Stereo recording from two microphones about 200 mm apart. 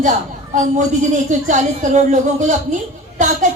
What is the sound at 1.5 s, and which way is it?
A woman's voice, 35° right (ahead or behind).